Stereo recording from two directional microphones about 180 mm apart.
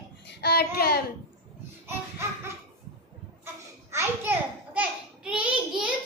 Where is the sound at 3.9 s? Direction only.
10° right (ahead or behind).